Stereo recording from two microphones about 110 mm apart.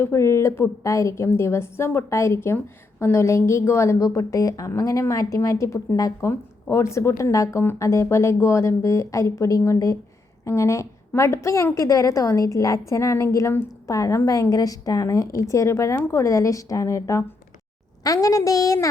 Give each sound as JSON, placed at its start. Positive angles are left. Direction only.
{"t": 0.0, "sound": "a woman's voice", "side_deg": 25}